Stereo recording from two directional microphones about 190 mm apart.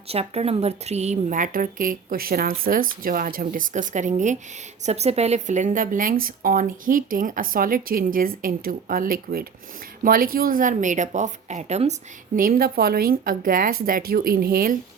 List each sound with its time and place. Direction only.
0.1 s a woman's voice: 30° right (ahead or behind)
12.4 s speech: 50° right (ahead or behind)